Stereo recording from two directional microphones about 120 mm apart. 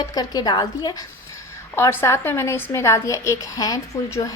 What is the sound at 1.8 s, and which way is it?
A woman's voice, 25° left (ahead or behind).